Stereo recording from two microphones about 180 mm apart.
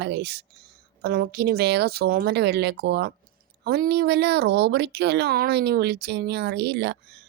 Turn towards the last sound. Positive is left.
turn(degrees=-65)  # may be behind; listen again after turning